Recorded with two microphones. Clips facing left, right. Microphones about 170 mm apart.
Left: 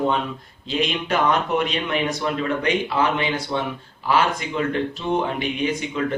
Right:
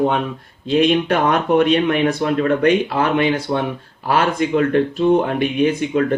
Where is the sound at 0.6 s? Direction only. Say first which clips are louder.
Right 9 dB; 55° right (ahead or behind).